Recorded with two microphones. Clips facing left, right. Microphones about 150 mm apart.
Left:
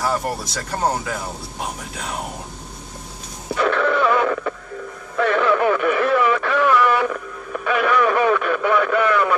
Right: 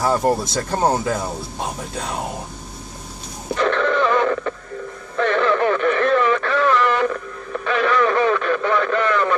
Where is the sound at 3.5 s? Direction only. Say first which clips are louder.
Even; 10° left (ahead or behind).